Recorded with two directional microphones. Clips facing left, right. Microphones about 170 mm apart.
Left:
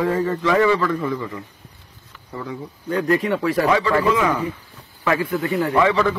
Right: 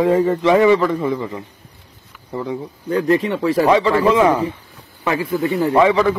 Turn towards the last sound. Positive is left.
turn(degrees=-15)  # may be behind; listen again after turning